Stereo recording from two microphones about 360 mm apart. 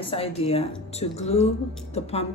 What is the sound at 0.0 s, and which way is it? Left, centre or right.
A woman's voice, centre.